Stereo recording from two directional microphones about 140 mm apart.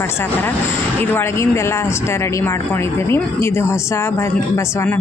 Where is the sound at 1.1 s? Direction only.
20° left (ahead or behind).